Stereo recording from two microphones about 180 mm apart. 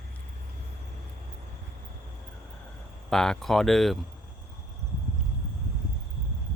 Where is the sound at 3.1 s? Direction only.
5° left (ahead or behind).